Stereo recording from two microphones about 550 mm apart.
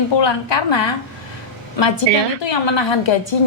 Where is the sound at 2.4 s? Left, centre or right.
Left.